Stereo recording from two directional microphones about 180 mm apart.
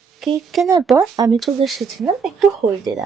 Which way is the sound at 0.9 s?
20° right (ahead or behind).